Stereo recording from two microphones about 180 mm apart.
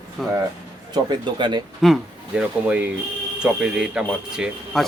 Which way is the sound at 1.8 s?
5° right (ahead or behind).